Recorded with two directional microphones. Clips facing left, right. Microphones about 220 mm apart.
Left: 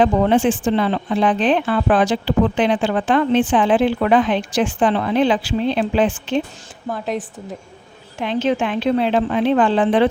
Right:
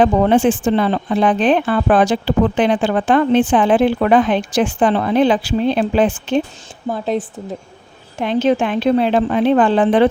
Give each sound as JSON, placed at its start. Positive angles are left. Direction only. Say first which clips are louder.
{"t": 0.0, "sound": "speech", "louder": "right 2 dB", "side_deg": -50}
{"t": 6.8, "sound": "speech", "louder": "right 4 dB", "side_deg": -30}
{"t": 8.2, "sound": "speech", "louder": "right 4 dB", "side_deg": -45}